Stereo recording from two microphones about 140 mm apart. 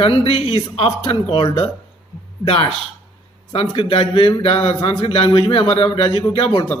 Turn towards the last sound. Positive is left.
turn(degrees=40)  # may be behind; listen again after turning